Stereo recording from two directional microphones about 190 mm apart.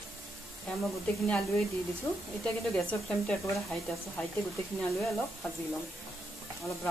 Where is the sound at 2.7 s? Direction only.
Centre (ahead or behind).